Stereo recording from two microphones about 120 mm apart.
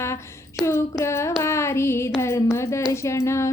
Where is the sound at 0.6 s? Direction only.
25° left (ahead or behind).